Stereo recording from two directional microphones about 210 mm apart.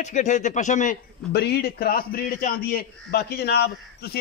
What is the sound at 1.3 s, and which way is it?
A man's voice, 50° left (ahead or behind).